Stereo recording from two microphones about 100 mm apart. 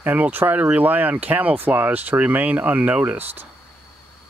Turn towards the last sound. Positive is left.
turn(degrees=-15)  # may be behind; listen again after turning